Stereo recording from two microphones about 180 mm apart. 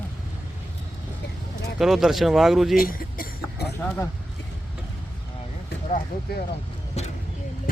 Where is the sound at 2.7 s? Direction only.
55° left (ahead or behind).